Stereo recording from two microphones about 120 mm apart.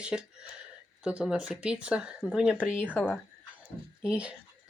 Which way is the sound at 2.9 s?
15° left (ahead or behind).